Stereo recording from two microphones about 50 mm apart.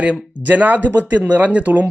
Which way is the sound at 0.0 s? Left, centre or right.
Right.